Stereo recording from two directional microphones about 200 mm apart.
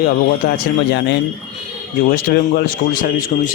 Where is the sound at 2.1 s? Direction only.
45° left (ahead or behind).